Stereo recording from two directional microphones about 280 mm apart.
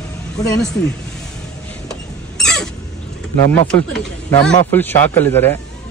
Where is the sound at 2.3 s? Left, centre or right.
Centre.